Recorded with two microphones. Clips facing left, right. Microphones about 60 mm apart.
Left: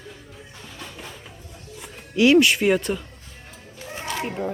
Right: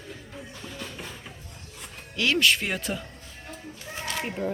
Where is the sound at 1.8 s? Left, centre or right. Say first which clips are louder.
Left 9 dB; centre.